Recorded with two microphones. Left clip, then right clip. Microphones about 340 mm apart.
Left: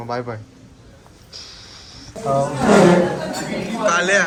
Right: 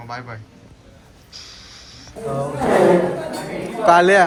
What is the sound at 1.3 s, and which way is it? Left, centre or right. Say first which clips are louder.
Music: left 1 dB; centre.